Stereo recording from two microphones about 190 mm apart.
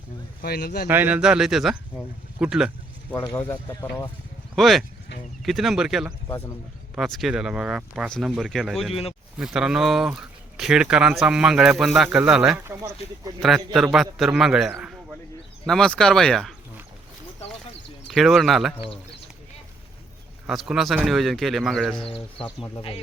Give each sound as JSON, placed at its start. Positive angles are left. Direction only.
{"t": 0.4, "sound": "speech", "side_deg": 55}
{"t": 0.9, "sound": "speech", "side_deg": -10}
{"t": 3.1, "sound": "speech", "side_deg": 15}
{"t": 4.5, "sound": "speech", "side_deg": 0}
{"t": 13.7, "sound": "speech", "side_deg": 0}
{"t": 18.1, "sound": "speech", "side_deg": 0}
{"t": 20.5, "sound": "speech", "side_deg": 0}
{"t": 21.9, "sound": "speech", "side_deg": 30}